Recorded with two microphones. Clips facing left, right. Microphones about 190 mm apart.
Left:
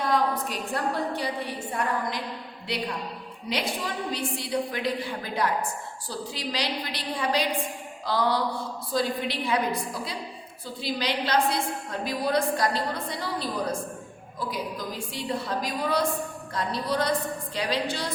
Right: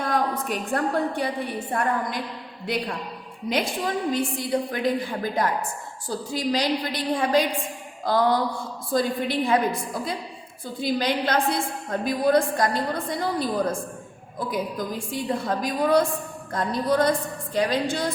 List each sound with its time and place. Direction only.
0.0 s a woman's voice: 50° right (ahead or behind)
3.5 s a woman's voice: 50° right (ahead or behind)